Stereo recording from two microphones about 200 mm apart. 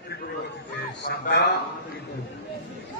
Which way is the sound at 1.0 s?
50° left (ahead or behind).